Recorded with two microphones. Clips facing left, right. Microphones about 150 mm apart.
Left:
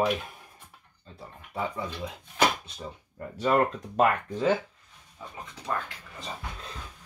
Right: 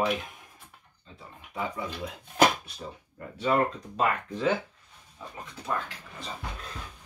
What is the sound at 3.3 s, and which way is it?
Speech, 45° left (ahead or behind).